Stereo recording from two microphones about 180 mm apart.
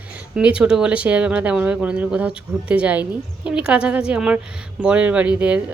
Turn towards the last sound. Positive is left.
turn(degrees=-5)  # may be behind; listen again after turning